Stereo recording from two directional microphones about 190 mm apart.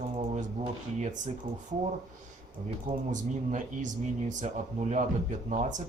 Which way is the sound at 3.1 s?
40° right (ahead or behind).